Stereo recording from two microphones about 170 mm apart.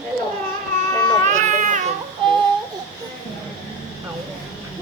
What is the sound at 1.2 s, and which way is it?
Baby cry, 45° right (ahead or behind).